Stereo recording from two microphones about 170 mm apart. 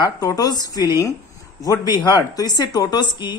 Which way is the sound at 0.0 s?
20° left (ahead or behind).